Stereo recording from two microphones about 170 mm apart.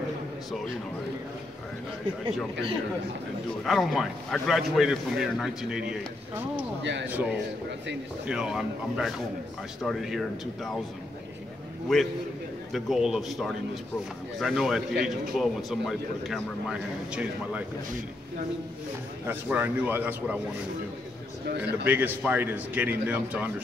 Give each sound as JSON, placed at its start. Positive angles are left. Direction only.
{"t": 3.6, "sound": "a man's voice", "side_deg": 0}
{"t": 6.8, "sound": "speech", "side_deg": -90}
{"t": 7.1, "sound": "a man's voice", "side_deg": -10}
{"t": 11.9, "sound": "a man's voice", "side_deg": 0}
{"t": 19.2, "sound": "a man's voice", "side_deg": -10}
{"t": 21.8, "sound": "a man's voice", "side_deg": -10}